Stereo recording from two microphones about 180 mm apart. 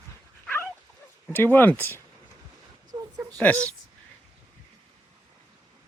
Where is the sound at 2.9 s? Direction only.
25° right (ahead or behind).